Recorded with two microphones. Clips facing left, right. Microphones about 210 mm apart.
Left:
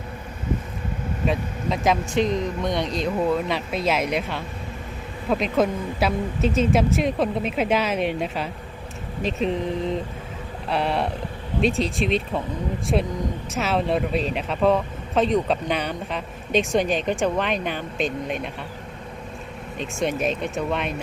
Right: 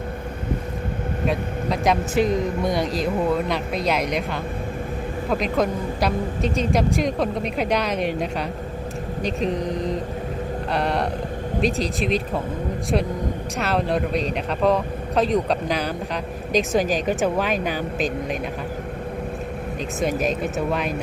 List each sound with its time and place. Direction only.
1.3 s speech: centre (ahead or behind)
10.7 s speech: centre (ahead or behind)
20.0 s speech: centre (ahead or behind)